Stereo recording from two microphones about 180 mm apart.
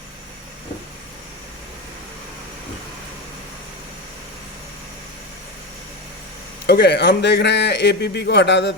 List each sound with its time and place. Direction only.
6.7 s a man's voice: 65° left (ahead or behind)